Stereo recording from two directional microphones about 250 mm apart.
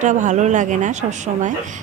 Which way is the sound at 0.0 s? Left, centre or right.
Right.